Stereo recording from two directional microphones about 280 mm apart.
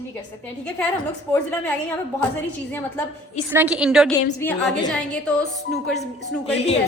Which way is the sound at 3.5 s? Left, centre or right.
Centre.